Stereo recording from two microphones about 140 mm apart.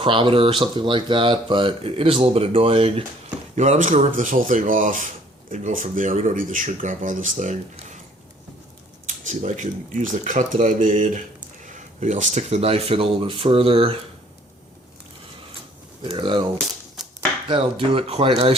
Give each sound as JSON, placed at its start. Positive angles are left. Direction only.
{"t": 0.0, "sound": "speech", "side_deg": -40}
{"t": 3.5, "sound": "speech", "side_deg": -55}
{"t": 9.0, "sound": "speech", "side_deg": -65}
{"t": 16.1, "sound": "speech", "side_deg": -35}
{"t": 17.0, "sound": "a sound", "side_deg": -5}
{"t": 17.5, "sound": "speech", "side_deg": -40}